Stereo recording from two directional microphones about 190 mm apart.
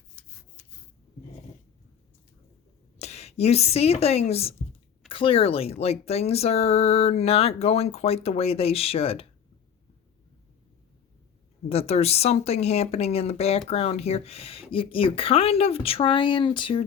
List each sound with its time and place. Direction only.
3.0 s speech: 35° left (ahead or behind)
11.7 s speech: 30° left (ahead or behind)